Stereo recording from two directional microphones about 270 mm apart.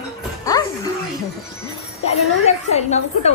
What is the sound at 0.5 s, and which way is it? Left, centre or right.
Music, centre.